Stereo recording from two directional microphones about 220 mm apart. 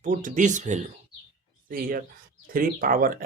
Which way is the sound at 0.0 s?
35° right (ahead or behind).